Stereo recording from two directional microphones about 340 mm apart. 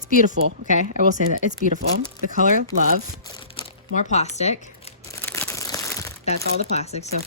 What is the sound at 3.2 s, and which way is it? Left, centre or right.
Crumpling, centre.